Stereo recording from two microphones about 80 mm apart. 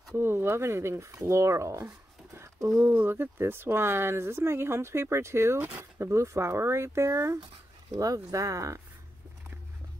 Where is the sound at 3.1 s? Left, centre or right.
Right.